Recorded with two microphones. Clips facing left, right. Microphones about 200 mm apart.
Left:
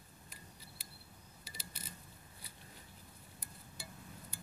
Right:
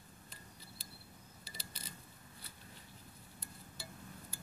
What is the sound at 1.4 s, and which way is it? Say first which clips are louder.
Mechanisms: even; 35° right (ahead or behind).